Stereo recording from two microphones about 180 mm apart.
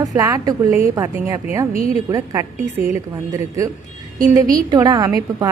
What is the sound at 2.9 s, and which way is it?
A woman's voice, 20° right (ahead or behind).